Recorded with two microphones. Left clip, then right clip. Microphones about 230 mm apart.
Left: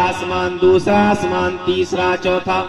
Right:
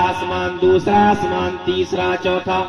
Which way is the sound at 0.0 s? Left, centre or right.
Left.